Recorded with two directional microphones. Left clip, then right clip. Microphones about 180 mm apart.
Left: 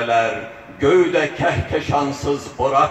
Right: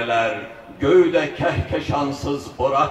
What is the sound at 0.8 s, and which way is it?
A man's voice, 45° left (ahead or behind).